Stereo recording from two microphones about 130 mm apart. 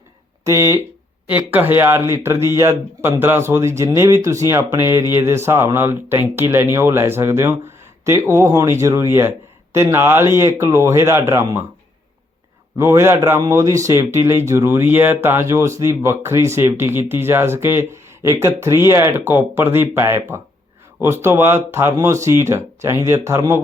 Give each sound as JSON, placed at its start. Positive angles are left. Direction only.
{"t": 0.4, "sound": "speech", "side_deg": -25}
{"t": 1.3, "sound": "speech", "side_deg": -10}
{"t": 12.7, "sound": "speech", "side_deg": -20}